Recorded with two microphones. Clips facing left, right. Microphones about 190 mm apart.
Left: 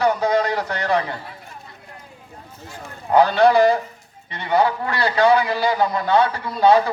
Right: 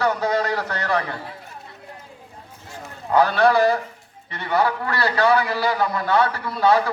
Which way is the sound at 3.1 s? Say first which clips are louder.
Left 3 dB; 20° left (ahead or behind).